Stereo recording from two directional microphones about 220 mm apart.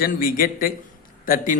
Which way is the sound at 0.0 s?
40° left (ahead or behind).